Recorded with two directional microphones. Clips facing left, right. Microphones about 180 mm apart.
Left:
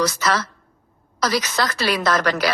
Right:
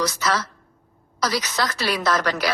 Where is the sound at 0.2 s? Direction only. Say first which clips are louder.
Left 2 dB; 75° left (ahead or behind).